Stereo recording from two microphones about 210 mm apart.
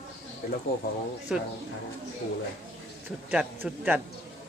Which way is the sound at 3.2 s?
5° right (ahead or behind).